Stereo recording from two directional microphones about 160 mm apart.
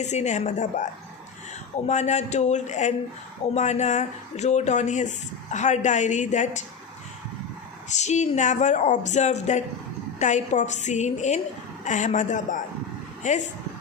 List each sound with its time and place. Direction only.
0.0 s speech: 45° left (ahead or behind)
1.9 s speech: 45° left (ahead or behind)
7.9 s speech: 45° left (ahead or behind)